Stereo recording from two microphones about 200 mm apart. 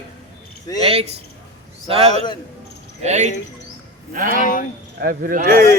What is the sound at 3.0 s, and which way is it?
Speech, 35° right (ahead or behind).